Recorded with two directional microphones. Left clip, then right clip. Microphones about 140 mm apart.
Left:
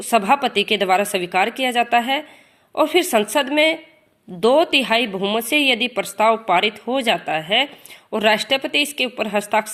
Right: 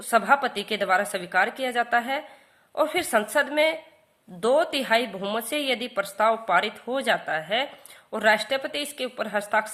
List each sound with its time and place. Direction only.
0.1 s a woman's voice: 15° left (ahead or behind)